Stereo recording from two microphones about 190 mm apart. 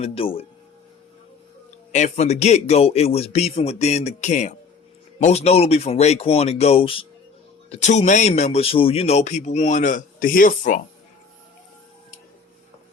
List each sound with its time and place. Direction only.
0.0 s speech: 30° left (ahead or behind)
1.9 s speech: 35° left (ahead or behind)